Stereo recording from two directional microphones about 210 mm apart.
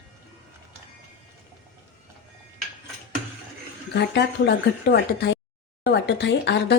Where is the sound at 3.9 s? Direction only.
55° left (ahead or behind).